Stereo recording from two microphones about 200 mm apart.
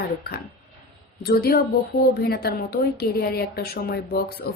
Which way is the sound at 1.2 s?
50° left (ahead or behind).